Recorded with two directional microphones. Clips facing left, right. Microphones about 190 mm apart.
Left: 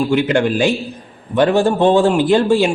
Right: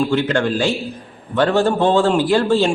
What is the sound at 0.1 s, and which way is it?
A man's voice, 15° left (ahead or behind).